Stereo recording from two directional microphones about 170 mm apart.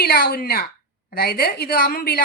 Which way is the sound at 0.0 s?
65° left (ahead or behind).